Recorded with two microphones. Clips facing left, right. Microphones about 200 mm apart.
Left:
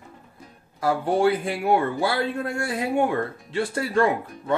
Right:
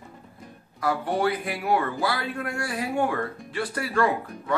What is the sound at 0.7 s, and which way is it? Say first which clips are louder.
A man's voice: left 4 dB; 25° left (ahead or behind).